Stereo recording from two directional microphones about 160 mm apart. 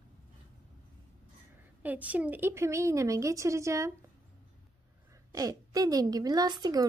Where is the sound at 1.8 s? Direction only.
10° right (ahead or behind).